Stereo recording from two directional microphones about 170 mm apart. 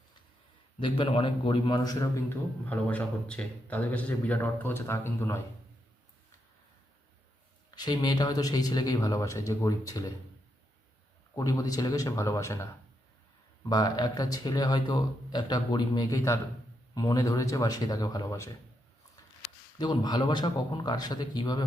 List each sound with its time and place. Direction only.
0.8 s a man's voice: 30° left (ahead or behind); by 5.4 s 15° left (ahead or behind)
7.8 s speech: 25° left (ahead or behind)
11.3 s speech: 20° left (ahead or behind)
13.7 s speech: 20° left (ahead or behind)
19.8 s speech: 25° left (ahead or behind)